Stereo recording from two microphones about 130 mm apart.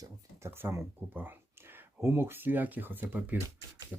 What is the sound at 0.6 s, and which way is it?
Speech, 15° right (ahead or behind).